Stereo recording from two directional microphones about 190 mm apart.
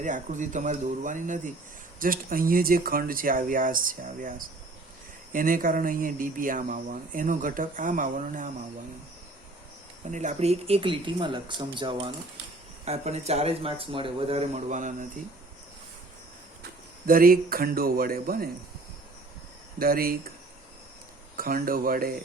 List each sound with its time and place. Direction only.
0.0 s speech: 40° right (ahead or behind)
10.1 s speech: 40° right (ahead or behind)
17.1 s speech: 50° right (ahead or behind)
19.8 s speech: 50° right (ahead or behind)
21.3 s speech: 50° right (ahead or behind)